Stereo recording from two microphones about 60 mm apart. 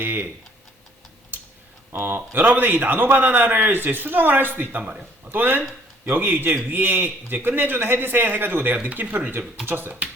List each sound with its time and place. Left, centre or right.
0.0 s a man's voice: right
1.9 s a man's voice: right
4.8 s a man's voice: right